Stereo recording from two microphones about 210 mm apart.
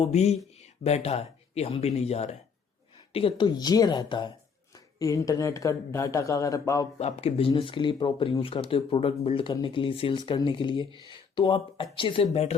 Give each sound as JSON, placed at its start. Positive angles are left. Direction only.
{"t": 0.0, "sound": "speech", "side_deg": 30}
{"t": 7.0, "sound": "speech", "side_deg": 30}